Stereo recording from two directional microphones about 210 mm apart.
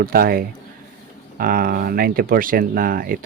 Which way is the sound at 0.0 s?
45° right (ahead or behind).